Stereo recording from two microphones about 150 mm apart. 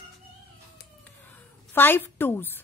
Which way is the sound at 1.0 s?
10° left (ahead or behind).